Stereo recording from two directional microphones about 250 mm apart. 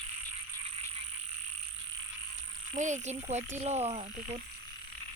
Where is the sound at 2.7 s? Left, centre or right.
Right.